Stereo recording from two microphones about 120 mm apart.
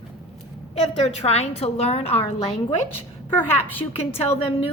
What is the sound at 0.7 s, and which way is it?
A woman's voice, 60° left (ahead or behind).